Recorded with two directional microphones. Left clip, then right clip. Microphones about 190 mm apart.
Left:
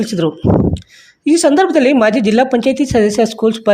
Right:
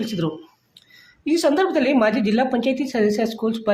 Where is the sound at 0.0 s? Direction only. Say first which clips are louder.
Left 10 dB; 35° left (ahead or behind).